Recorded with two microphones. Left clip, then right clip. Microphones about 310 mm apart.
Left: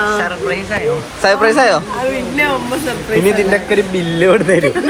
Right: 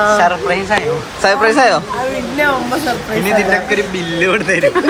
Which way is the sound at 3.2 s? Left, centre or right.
Centre.